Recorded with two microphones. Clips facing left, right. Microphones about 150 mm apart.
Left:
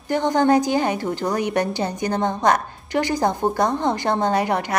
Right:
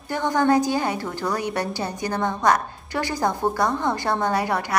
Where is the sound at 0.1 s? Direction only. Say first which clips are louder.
Left 3 dB; 20° left (ahead or behind).